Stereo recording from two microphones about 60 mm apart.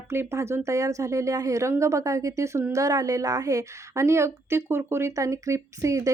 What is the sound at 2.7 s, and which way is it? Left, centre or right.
A woman's voice, right.